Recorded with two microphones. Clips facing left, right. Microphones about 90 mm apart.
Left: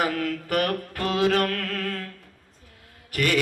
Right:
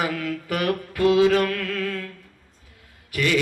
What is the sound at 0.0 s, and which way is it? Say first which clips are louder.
Mantra: left 1 dB; 50° left (ahead or behind).